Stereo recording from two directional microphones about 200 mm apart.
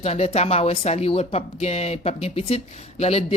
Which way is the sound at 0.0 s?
30° left (ahead or behind).